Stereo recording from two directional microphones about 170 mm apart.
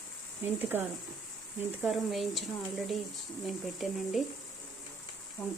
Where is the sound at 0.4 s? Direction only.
10° right (ahead or behind).